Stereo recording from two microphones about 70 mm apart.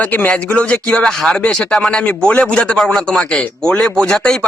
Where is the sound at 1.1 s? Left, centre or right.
Centre.